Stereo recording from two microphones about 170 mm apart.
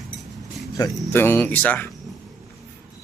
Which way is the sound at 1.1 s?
10° left (ahead or behind).